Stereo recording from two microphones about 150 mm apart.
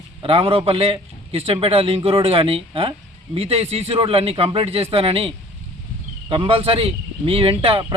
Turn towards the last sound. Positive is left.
turn(degrees=-35)  # may be behind; listen again after turning